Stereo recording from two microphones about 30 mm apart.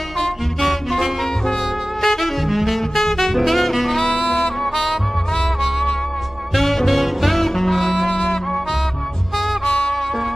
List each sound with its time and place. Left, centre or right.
0.2 s music: centre
2.0 s saxophone: centre
6.5 s music: centre
7.0 s saxophone: centre
7.3 s music: centre
7.7 s music: centre
8.1 s music: left
9.7 s music: left